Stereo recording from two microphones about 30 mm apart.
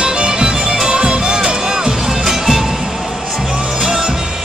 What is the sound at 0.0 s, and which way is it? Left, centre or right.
Music, right.